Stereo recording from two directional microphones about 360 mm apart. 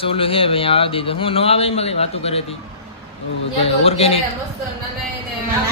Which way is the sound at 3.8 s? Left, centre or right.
Centre.